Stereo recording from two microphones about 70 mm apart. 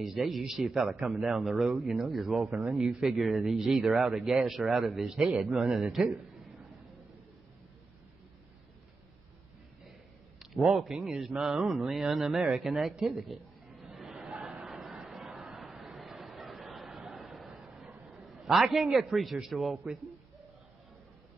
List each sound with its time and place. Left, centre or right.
0.0 s a man's voice: centre
10.4 s a man's voice: centre
11.4 s a man's voice: centre
13.8 s a sound: centre
19.4 s a man's voice: centre
19.7 s a man's voice: centre